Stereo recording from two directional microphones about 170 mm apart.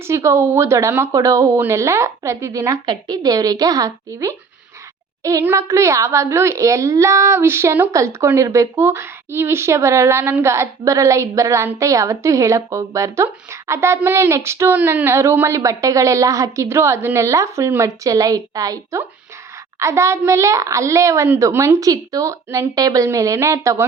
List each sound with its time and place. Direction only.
0.0 s a child's voice: 15° right (ahead or behind)